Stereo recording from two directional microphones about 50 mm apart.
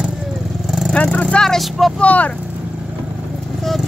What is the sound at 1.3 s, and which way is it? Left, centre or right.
Speech, left.